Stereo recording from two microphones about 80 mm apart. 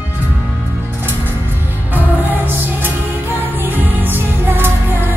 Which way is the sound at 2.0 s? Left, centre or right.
Right.